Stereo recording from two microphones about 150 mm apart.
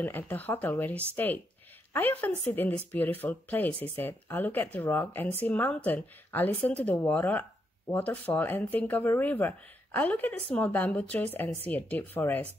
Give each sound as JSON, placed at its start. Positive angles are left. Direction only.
{"t": 0.0, "sound": "a woman's voice", "side_deg": 10}